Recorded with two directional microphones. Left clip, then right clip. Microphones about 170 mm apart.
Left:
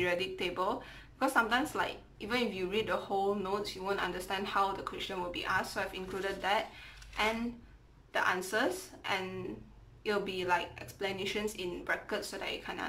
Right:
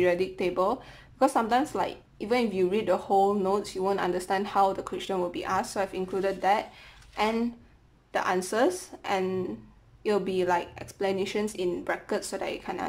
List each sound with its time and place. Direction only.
0.0 s a woman's voice: 30° right (ahead or behind)